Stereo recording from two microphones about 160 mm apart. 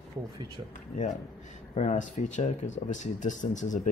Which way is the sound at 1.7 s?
50° left (ahead or behind).